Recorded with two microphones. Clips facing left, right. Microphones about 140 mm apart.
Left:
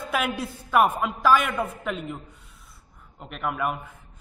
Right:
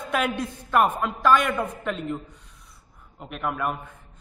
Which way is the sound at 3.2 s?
Centre (ahead or behind).